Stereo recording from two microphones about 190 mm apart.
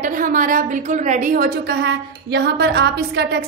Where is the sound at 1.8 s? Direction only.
65° right (ahead or behind).